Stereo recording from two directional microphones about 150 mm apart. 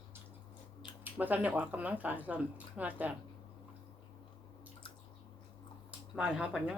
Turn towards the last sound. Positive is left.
turn(degrees=-5)  # may be behind; listen again after turning